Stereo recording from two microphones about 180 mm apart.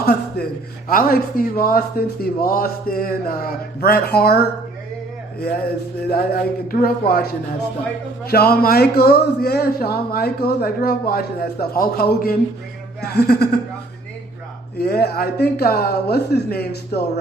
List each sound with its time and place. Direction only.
0.0 s a sound: 60° left (ahead or behind)
0.9 s speech: 55° left (ahead or behind)
6.0 s speech: 60° left (ahead or behind)
14.8 s speech: 60° left (ahead or behind)